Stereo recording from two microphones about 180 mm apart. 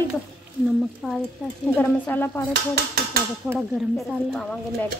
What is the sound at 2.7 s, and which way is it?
Speech, 55° right (ahead or behind).